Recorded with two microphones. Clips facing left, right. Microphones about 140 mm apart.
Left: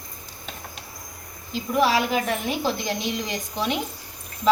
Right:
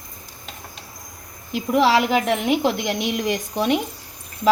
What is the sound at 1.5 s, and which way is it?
A woman's voice, 80° right.